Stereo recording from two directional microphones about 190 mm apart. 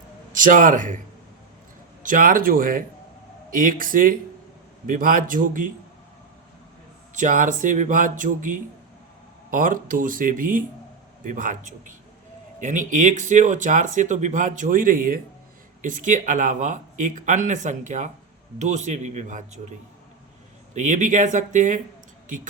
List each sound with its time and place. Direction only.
0.3 s speech: 45° right (ahead or behind)
2.0 s speech: 45° right (ahead or behind)
7.1 s speech: 40° right (ahead or behind)
20.7 s speech: 40° right (ahead or behind)